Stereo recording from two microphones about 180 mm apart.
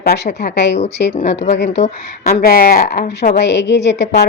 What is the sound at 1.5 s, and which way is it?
Speech, 70° left (ahead or behind).